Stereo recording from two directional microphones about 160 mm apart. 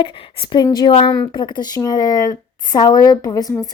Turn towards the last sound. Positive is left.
turn(degrees=25)  # may be behind; listen again after turning